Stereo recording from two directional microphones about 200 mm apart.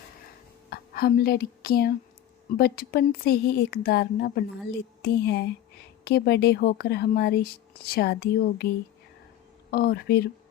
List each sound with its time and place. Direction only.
0.7 s a woman's voice: 50° left (ahead or behind)
9.7 s speech: 50° left (ahead or behind)